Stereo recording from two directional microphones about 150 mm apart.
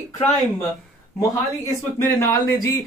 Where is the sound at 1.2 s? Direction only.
20° left (ahead or behind).